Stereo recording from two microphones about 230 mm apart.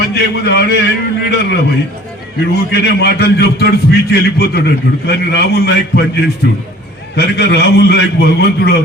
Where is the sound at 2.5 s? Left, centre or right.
Left.